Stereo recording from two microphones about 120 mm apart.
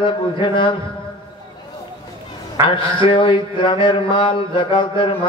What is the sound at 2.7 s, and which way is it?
A man's voice, 45° left (ahead or behind).